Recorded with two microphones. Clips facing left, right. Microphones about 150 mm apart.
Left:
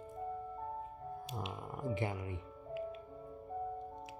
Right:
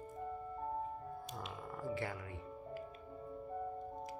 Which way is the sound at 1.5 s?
20° left (ahead or behind).